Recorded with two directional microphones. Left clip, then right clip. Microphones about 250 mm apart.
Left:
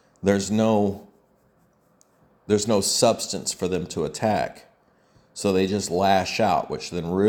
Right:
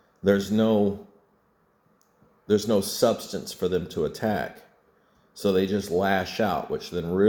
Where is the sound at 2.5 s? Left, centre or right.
Left.